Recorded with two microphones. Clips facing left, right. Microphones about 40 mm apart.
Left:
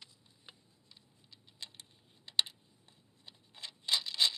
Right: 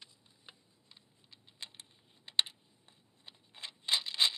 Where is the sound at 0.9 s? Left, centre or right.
Right.